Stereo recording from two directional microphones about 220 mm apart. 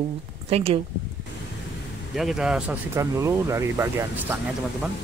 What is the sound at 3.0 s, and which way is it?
Speech, 15° right (ahead or behind).